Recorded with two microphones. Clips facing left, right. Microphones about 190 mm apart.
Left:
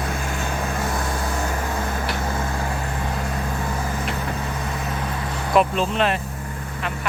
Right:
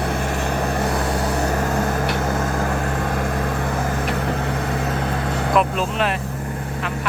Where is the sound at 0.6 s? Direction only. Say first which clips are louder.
Right 4 dB; 35° right (ahead or behind).